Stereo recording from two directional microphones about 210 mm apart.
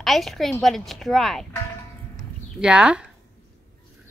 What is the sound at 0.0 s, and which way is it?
A woman's voice, centre (ahead or behind).